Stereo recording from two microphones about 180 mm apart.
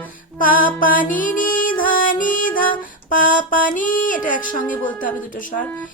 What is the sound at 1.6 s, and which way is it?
Music, 50° left (ahead or behind).